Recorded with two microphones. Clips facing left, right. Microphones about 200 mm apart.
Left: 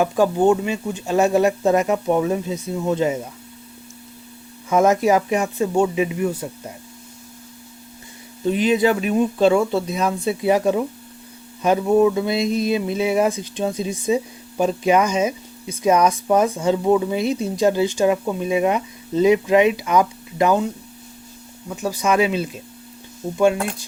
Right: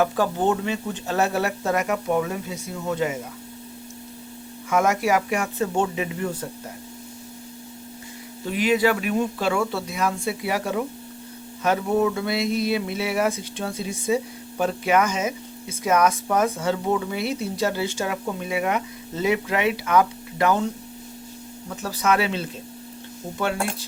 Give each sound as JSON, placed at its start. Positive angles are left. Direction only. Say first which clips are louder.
{"t": 0.0, "sound": "speech", "louder": "left 5 dB", "side_deg": 15}
{"t": 4.7, "sound": "speech", "louder": "left 5 dB", "side_deg": 25}
{"t": 8.4, "sound": "speech", "louder": "left 3 dB", "side_deg": 25}
{"t": 21.8, "sound": "speech", "louder": "left 4 dB", "side_deg": 15}